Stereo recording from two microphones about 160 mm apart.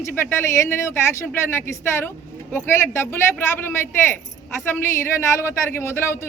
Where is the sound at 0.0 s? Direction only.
15° left (ahead or behind).